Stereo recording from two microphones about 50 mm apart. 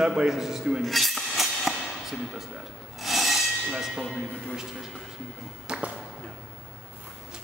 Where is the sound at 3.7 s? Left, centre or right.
Centre.